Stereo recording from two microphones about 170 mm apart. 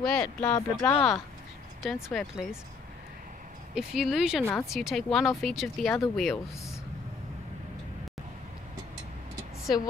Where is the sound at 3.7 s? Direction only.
5° right (ahead or behind).